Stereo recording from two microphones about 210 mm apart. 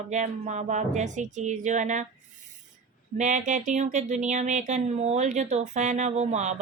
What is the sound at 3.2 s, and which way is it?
A woman's voice, 35° right (ahead or behind).